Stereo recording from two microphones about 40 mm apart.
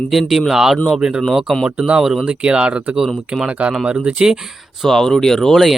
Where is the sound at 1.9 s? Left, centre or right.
Centre.